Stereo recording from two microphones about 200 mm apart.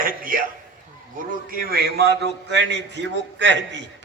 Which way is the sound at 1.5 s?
50° right (ahead or behind).